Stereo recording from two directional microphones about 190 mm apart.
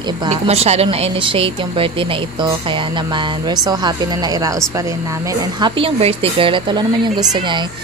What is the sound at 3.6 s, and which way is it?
Speech, 20° right (ahead or behind).